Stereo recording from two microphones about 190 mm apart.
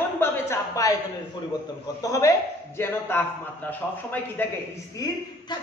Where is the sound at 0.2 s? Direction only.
15° left (ahead or behind).